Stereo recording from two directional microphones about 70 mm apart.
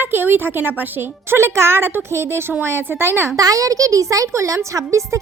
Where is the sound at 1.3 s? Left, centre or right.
Right.